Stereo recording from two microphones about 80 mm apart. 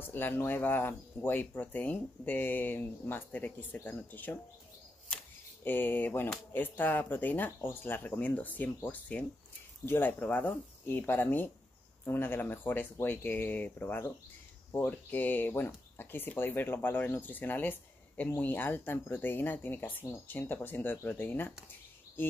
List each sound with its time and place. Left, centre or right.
0.0 s speech: left
5.6 s speech: left